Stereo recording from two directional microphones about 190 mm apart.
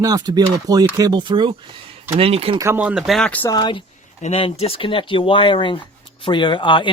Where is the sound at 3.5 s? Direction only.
25° left (ahead or behind).